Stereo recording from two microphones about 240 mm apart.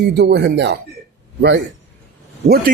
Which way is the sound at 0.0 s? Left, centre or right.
Right.